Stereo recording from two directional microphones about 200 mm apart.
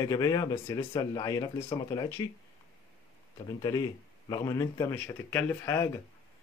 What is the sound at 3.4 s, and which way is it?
Speech, 20° left (ahead or behind).